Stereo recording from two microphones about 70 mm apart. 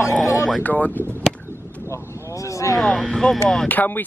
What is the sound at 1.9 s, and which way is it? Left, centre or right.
Speech, left.